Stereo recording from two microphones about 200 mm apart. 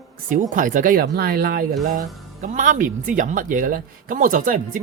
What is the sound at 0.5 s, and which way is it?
Speech, 40° right (ahead or behind).